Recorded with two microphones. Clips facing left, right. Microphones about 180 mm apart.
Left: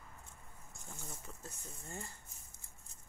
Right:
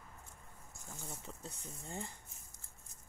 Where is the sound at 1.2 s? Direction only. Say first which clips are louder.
Right 2 dB; 25° right (ahead or behind).